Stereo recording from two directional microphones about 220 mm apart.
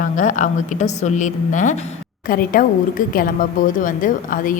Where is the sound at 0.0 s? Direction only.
35° left (ahead or behind).